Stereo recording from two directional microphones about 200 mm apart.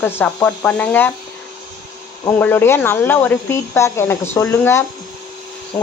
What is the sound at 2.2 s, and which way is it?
Speech, 10° left (ahead or behind).